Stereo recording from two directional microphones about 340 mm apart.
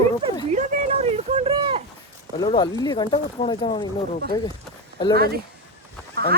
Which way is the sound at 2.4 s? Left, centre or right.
Centre.